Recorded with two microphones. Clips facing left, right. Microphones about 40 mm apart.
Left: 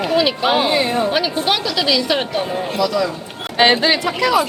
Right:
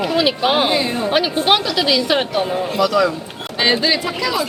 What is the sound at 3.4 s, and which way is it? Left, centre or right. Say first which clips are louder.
Music: left 4 dB; left.